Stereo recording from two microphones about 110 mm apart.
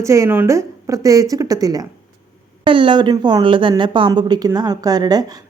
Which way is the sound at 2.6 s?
50° right (ahead or behind).